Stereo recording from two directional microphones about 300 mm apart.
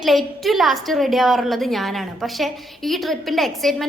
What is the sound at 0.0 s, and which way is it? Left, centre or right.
A woman's voice, centre.